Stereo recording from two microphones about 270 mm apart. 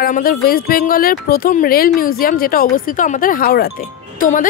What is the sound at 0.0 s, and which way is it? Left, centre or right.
A woman's voice, left.